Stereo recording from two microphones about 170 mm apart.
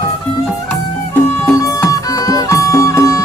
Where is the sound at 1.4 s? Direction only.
20° left (ahead or behind).